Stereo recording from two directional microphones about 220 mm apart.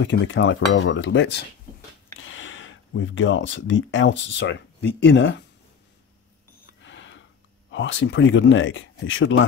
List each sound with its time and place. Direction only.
0.0 s speech: 60° left (ahead or behind)
6.8 s a sound: 55° left (ahead or behind)
7.7 s speech: 55° left (ahead or behind)